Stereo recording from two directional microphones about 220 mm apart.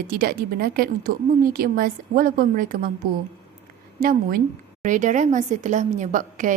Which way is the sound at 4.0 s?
40° right (ahead or behind).